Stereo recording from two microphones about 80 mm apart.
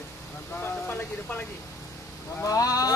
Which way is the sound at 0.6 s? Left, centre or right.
Left.